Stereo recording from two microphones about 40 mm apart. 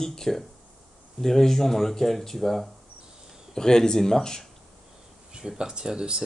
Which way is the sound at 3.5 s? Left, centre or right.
Centre.